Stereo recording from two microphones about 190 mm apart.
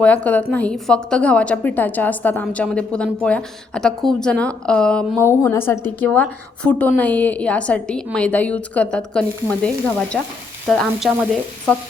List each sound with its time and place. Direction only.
0.0 s a woman's voice: 5° left (ahead or behind)